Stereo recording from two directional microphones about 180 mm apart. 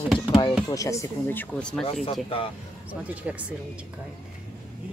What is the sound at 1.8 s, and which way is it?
Speech, 35° left (ahead or behind).